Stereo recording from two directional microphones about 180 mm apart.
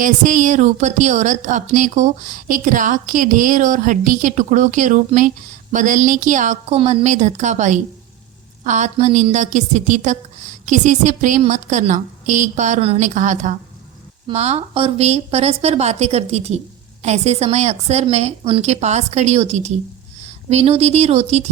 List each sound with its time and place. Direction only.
0.0 s a woman's voice: 45° right (ahead or behind)